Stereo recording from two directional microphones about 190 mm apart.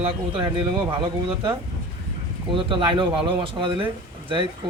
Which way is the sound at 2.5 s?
25° right (ahead or behind).